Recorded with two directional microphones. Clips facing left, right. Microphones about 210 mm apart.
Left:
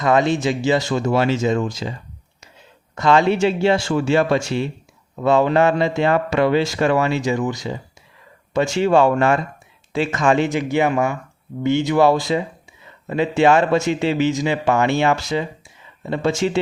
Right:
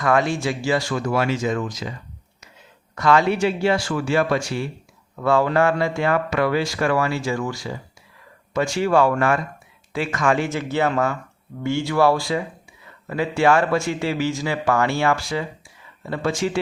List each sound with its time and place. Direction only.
0.0 s speech: 20° left (ahead or behind)